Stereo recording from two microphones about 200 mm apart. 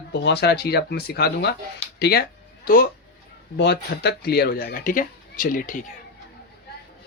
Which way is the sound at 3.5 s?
60° left (ahead or behind).